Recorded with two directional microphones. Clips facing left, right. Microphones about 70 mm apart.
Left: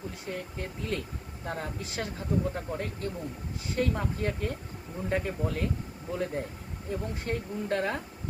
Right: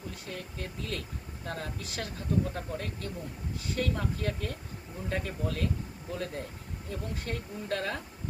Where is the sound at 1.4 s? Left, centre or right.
Left.